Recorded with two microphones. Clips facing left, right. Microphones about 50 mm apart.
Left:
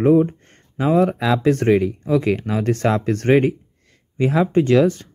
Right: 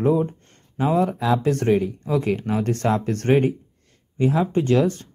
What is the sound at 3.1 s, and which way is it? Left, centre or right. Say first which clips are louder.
Speech: left 4 dB; left.